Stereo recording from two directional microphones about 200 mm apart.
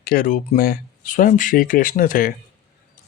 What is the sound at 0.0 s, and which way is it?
Speech, 45° left (ahead or behind).